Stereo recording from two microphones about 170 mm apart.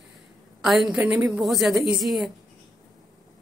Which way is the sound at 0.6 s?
Centre (ahead or behind).